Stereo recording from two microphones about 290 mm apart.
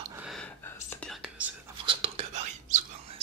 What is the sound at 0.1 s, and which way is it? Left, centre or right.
Whispering, centre.